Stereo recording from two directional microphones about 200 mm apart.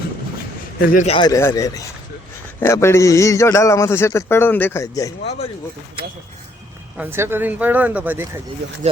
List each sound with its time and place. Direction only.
0.8 s speech: 45° left (ahead or behind)
1.0 s a man's voice: 25° left (ahead or behind)
6.9 s speech: 10° right (ahead or behind)